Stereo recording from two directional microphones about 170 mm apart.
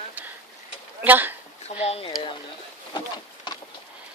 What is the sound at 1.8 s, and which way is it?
Speech, 35° left (ahead or behind).